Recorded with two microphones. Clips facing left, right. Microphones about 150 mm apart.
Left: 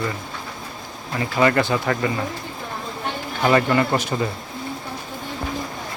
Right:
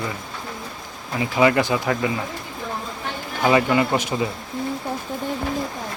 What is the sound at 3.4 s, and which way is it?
Speech, 5° right (ahead or behind).